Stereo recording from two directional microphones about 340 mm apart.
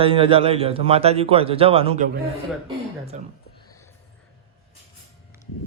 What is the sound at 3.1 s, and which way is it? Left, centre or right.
Speech, right.